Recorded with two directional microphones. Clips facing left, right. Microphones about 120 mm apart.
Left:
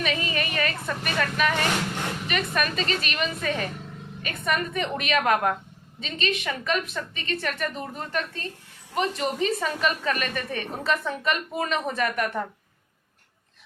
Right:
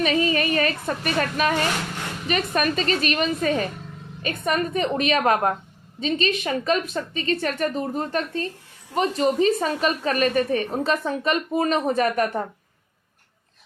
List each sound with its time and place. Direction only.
0.0 s a woman's voice: 35° right (ahead or behind)